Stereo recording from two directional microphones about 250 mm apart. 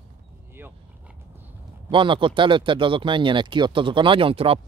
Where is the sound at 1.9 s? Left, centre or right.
Centre.